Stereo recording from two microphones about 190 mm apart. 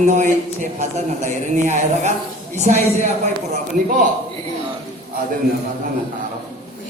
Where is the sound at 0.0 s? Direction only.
40° right (ahead or behind).